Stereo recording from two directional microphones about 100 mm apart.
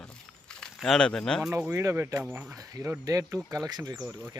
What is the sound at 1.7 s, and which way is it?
Speech, 30° right (ahead or behind).